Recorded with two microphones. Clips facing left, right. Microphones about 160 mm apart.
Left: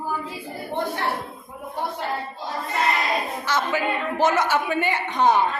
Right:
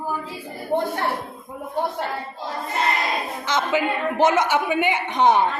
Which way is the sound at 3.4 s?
20° right (ahead or behind).